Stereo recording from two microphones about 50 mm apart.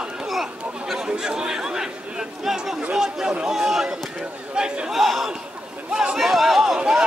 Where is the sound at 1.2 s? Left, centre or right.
Centre.